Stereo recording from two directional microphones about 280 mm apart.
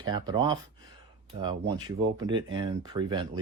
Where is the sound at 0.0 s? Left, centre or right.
Centre.